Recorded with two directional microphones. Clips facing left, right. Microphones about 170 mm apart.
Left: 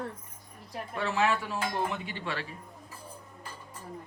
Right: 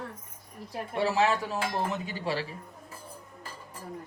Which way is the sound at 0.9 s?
35° right (ahead or behind).